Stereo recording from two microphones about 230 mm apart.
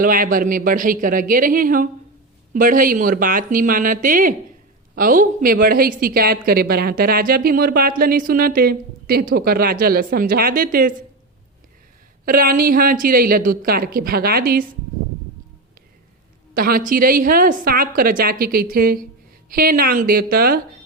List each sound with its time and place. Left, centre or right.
0.0 s a woman's voice: right
12.2 s a woman's voice: right
16.6 s a woman's voice: right